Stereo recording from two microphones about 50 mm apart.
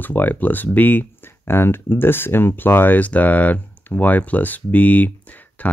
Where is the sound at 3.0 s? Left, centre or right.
Left.